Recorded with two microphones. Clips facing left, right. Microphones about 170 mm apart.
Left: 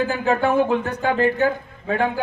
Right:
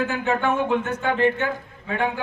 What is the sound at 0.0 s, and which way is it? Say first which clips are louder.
A man's voice: left 3 dB; 30° left (ahead or behind).